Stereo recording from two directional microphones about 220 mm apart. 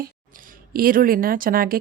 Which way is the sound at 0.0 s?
40° right (ahead or behind).